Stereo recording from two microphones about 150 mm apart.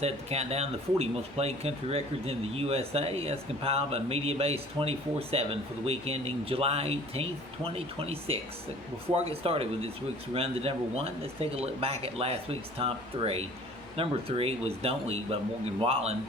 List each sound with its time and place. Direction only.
0.0 s speech: 45° right (ahead or behind)